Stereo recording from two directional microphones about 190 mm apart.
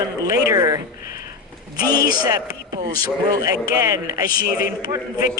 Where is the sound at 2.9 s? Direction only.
20° right (ahead or behind).